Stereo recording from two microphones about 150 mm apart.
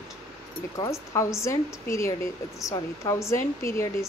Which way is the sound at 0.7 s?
20° left (ahead or behind).